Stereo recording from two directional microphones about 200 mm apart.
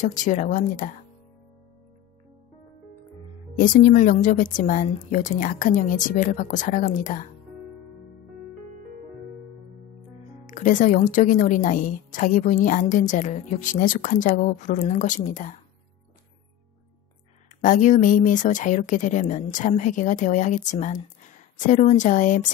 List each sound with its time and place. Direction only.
0.0 s speech: 40° left (ahead or behind)
3.5 s speech: 40° left (ahead or behind)
10.4 s speech: 40° left (ahead or behind)
17.6 s speech: 40° left (ahead or behind)